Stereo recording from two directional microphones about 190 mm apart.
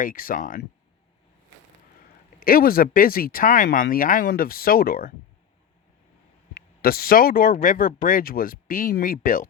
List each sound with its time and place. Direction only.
0.0 s speech: 45° left (ahead or behind)
2.4 s speech: 50° left (ahead or behind)
6.5 s speech: 50° left (ahead or behind)